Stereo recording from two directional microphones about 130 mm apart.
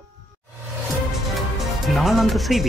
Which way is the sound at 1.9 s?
Centre (ahead or behind).